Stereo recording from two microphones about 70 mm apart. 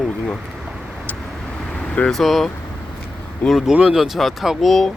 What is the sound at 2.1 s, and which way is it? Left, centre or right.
Speech, centre.